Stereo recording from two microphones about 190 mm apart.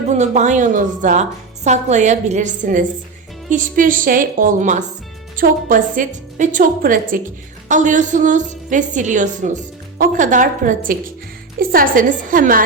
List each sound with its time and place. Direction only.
0.1 s a woman's voice: 40° right (ahead or behind)